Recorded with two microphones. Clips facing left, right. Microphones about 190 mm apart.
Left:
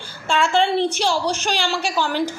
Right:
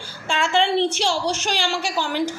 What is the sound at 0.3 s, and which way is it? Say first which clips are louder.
Speech: left 2 dB; 55° left (ahead or behind).